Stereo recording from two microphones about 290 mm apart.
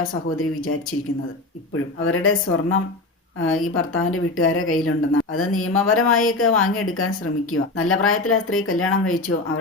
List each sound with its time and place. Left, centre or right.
0.1 s speech: left